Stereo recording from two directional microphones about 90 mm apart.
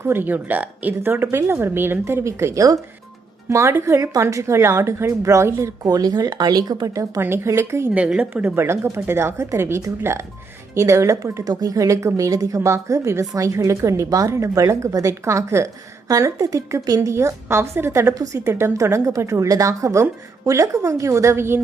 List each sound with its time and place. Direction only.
0.0 s a woman's voice: 25° right (ahead or behind)
7.9 s a woman's voice: 15° right (ahead or behind)
18.1 s a woman's voice: 40° right (ahead or behind)